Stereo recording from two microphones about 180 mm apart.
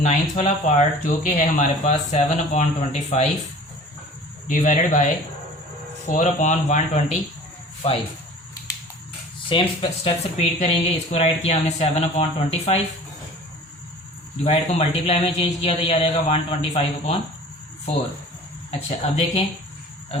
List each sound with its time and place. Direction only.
0.0 s speech: 40° left (ahead or behind)
4.4 s speech: 45° left (ahead or behind)
6.1 s speech: 45° left (ahead or behind)
9.5 s speech: 30° left (ahead or behind)
14.4 s speech: 35° left (ahead or behind)
18.7 s speech: 35° left (ahead or behind)